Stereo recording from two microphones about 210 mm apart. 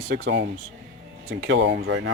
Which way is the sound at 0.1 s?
55° right (ahead or behind).